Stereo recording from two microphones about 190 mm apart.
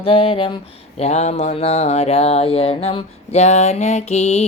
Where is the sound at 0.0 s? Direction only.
30° left (ahead or behind).